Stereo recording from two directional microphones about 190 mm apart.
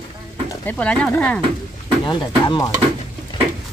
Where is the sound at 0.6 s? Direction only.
5° left (ahead or behind).